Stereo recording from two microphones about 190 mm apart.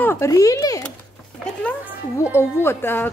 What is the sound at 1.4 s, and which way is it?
A woman's voice, 5° left (ahead or behind).